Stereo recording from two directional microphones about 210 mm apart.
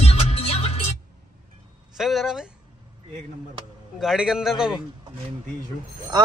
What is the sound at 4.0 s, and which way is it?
Speech, centre (ahead or behind).